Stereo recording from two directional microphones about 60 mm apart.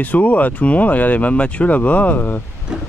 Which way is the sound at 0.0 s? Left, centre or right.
Left.